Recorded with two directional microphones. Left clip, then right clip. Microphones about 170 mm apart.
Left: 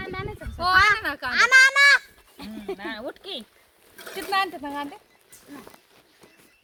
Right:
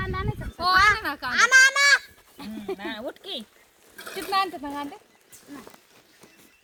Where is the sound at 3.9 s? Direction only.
15° left (ahead or behind).